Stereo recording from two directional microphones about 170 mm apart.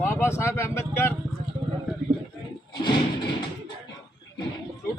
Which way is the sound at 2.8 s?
25° left (ahead or behind).